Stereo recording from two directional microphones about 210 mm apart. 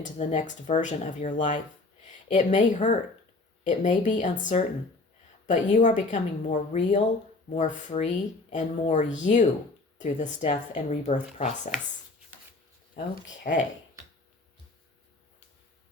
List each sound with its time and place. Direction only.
0.0 s speech: 35° left (ahead or behind)
13.5 s speech: 40° left (ahead or behind)